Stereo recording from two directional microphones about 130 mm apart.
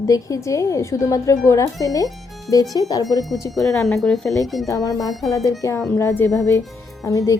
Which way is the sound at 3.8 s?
5° left (ahead or behind).